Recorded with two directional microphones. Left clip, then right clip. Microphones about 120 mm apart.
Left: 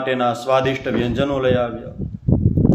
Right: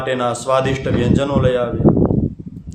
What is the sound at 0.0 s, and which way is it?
A man's voice, 20° right (ahead or behind).